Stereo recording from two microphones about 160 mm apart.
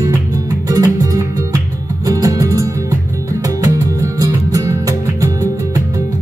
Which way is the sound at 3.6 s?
20° right (ahead or behind).